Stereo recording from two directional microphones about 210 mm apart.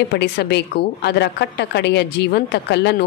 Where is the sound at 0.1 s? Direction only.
50° left (ahead or behind).